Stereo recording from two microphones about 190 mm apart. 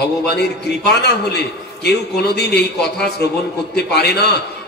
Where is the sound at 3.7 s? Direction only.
60° left (ahead or behind).